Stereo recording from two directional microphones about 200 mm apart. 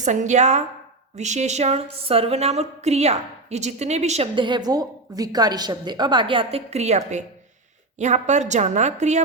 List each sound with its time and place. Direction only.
0.0 s a woman's voice: 35° right (ahead or behind)